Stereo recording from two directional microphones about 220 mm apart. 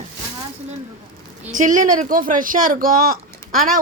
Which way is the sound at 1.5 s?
35° right (ahead or behind).